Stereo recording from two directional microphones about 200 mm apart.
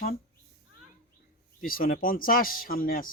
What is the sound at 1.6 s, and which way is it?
Speech, 45° left (ahead or behind).